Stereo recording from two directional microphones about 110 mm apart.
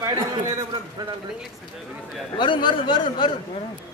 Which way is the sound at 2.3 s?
45° left (ahead or behind).